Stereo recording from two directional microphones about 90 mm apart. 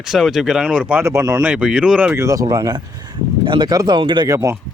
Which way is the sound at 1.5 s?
10° right (ahead or behind).